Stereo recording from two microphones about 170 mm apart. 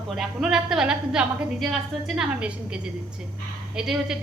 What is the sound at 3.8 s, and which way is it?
Speech, 5° right (ahead or behind).